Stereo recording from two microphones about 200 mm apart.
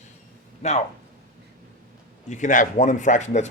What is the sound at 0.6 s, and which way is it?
Speech, 35° left (ahead or behind).